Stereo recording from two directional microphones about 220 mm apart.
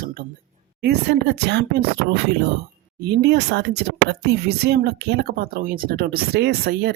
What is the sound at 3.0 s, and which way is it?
Speech, 50° right (ahead or behind).